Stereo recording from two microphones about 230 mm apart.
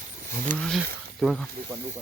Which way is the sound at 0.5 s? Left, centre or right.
Centre.